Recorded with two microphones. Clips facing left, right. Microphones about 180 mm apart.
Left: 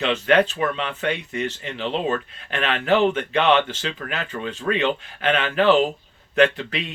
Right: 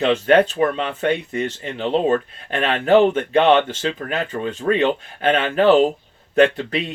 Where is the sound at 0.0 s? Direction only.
40° right (ahead or behind).